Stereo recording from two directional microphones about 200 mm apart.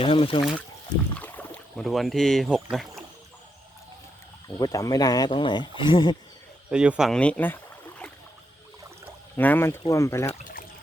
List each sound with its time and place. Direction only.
0.0 s speech: 25° left (ahead or behind)
1.2 s speech: 5° left (ahead or behind)
4.4 s speech: 15° left (ahead or behind)
6.7 s speech: 5° right (ahead or behind)
9.4 s speech: 10° left (ahead or behind)